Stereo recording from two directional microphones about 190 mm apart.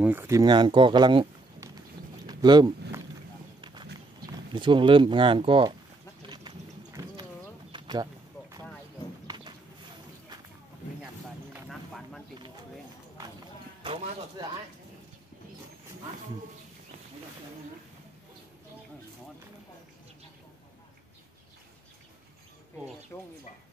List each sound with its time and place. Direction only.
0.0 s speech: 10° right (ahead or behind)
2.2 s a sound: 20° right (ahead or behind)
4.6 s speech: 25° right (ahead or behind)
6.2 s boat: 20° right (ahead or behind)
7.7 s a sound: 25° right (ahead or behind)
23.1 s speech: 15° left (ahead or behind)